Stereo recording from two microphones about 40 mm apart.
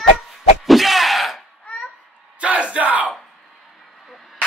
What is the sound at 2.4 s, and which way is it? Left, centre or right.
Battle cry, right.